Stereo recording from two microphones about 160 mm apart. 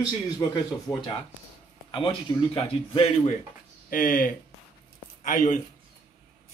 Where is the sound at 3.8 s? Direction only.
60° left (ahead or behind).